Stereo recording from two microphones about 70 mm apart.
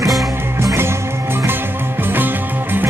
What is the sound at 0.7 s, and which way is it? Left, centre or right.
Music, right.